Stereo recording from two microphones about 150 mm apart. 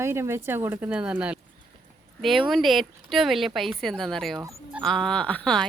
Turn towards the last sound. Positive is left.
turn(degrees=5)  # may be behind; listen again after turning